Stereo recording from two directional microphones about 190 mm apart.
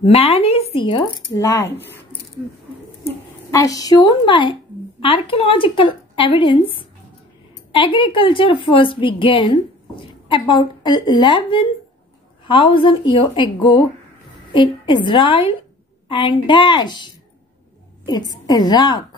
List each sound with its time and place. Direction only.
0.0 s speech: 30° left (ahead or behind); by 2.0 s 10° left (ahead or behind)
3.5 s speech: 20° left (ahead or behind)